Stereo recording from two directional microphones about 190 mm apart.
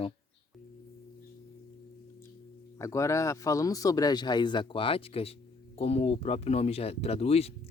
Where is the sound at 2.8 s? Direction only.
15° left (ahead or behind).